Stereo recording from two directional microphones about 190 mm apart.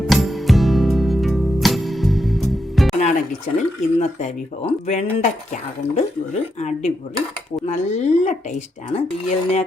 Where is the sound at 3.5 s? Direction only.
40° left (ahead or behind).